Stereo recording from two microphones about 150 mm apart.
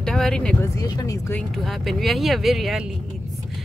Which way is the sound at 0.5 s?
20° left (ahead or behind).